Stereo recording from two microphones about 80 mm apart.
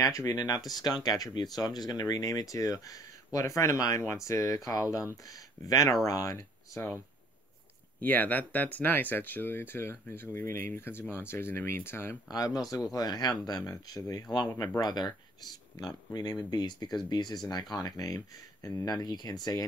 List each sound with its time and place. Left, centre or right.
0.0 s speech: left
0.7 s speech: left
8.0 s speech: left
12.3 s speech: left
14.3 s speech: left
19.0 s speech: left